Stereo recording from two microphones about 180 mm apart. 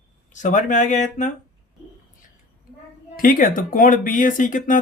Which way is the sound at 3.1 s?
50° left (ahead or behind).